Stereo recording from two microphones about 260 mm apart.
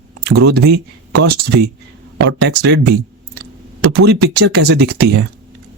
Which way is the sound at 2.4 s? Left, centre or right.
Right.